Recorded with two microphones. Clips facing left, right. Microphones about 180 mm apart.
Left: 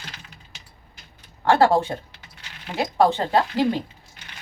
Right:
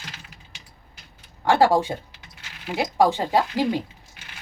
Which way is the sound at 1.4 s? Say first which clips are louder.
Left 1 dB; 15° right (ahead or behind).